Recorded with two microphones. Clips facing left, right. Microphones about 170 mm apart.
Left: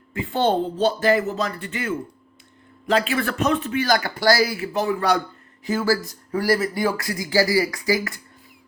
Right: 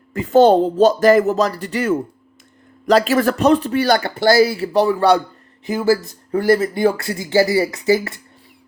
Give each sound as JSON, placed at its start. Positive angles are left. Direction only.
{"t": 0.1, "sound": "speech", "side_deg": -40}
{"t": 5.6, "sound": "speech", "side_deg": -20}